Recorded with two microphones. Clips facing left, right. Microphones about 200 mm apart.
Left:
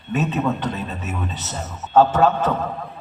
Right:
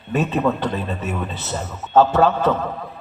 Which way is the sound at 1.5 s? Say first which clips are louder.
Right 3 dB; 40° right (ahead or behind).